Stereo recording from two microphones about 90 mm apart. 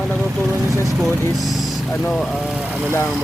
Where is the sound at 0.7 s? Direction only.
35° right (ahead or behind).